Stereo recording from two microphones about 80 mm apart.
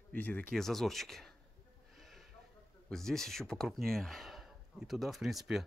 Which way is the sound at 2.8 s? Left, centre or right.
Centre.